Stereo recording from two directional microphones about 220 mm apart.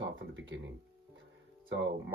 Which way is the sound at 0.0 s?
55° right (ahead or behind).